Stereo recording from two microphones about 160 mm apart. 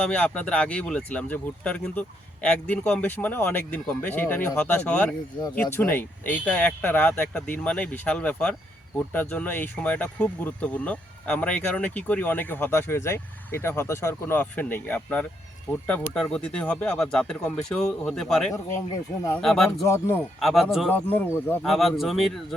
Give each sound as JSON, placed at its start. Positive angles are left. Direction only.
{"t": 0.0, "sound": "speech", "side_deg": 5}
{"t": 19.9, "sound": "speech", "side_deg": 15}
{"t": 20.4, "sound": "speech", "side_deg": 0}
{"t": 20.9, "sound": "speech", "side_deg": 10}
{"t": 21.6, "sound": "speech", "side_deg": 0}